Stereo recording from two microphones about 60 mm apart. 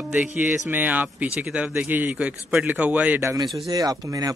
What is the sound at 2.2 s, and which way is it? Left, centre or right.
Speech, centre.